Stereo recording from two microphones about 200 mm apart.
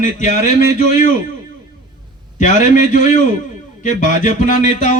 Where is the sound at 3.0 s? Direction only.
40° left (ahead or behind).